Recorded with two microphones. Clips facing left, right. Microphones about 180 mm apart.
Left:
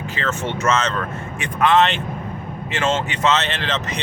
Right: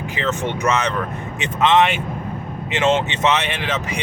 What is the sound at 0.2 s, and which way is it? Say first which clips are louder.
Speech: right 2 dB; 15° right (ahead or behind).